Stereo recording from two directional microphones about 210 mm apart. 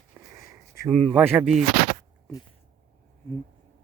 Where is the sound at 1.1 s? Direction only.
10° right (ahead or behind).